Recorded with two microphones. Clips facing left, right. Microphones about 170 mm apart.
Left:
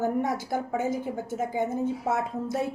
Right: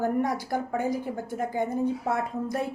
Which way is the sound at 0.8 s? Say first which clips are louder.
Even; 20° left (ahead or behind).